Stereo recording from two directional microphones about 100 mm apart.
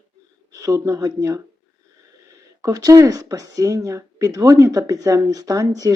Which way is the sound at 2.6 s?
35° right (ahead or behind).